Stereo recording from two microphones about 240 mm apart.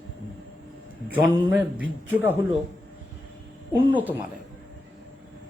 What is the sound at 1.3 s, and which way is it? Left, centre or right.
A man's voice, centre.